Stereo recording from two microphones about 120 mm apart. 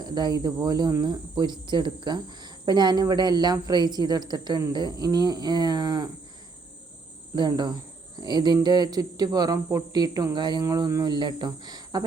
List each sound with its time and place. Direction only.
0.0 s speech: 35° right (ahead or behind)
7.3 s speech: 35° right (ahead or behind)